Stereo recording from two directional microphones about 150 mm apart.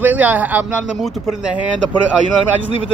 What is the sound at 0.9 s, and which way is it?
Speech, centre (ahead or behind).